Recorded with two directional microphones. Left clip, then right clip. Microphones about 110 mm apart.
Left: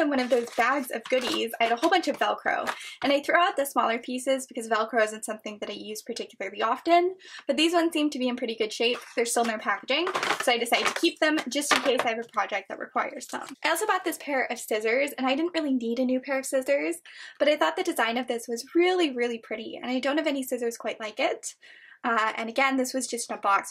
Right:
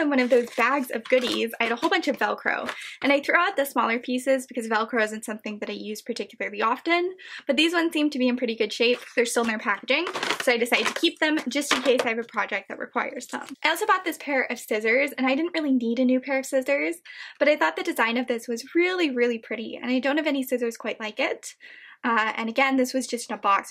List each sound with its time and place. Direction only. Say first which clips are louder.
0.0 s speech: right 3 dB; 20° right (ahead or behind)